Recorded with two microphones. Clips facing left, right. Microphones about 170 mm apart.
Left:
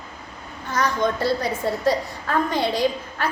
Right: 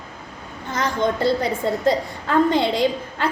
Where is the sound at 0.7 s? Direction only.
25° right (ahead or behind).